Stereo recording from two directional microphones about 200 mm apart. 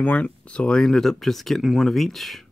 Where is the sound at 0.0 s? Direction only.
5° left (ahead or behind).